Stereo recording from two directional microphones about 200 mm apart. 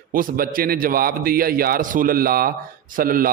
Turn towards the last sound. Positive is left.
turn(degrees=-45)  # may be behind; listen again after turning